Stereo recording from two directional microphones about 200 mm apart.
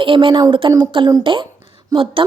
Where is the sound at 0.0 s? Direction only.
25° right (ahead or behind).